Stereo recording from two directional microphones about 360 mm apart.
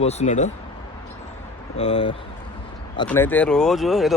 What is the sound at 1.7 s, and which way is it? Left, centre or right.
Speech, centre.